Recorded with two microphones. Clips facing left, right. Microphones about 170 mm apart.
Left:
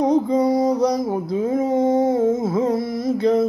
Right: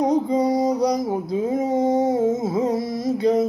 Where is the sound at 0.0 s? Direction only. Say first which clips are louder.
Left 2 dB; 15° right (ahead or behind).